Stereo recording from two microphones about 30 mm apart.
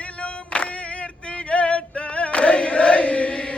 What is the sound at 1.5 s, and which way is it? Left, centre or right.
Chant, left.